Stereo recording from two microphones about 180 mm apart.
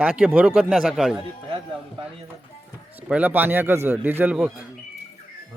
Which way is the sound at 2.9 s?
10° right (ahead or behind).